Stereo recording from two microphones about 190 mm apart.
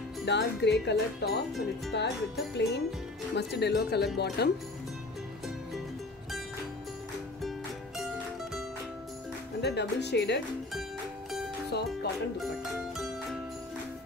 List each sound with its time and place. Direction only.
0.2 s speech: 65° left (ahead or behind)
9.6 s speech: 60° left (ahead or behind)
11.7 s music: 60° left (ahead or behind)
12.9 s music: centre (ahead or behind)